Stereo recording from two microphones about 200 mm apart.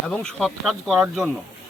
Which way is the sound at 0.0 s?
5° left (ahead or behind).